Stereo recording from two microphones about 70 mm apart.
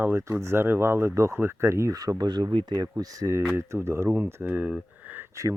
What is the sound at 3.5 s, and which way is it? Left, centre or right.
Speech, right.